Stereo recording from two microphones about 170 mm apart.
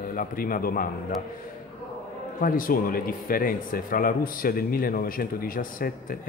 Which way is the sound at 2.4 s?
55° left (ahead or behind).